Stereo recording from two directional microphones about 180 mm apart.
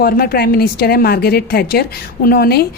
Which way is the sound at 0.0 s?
55° left (ahead or behind).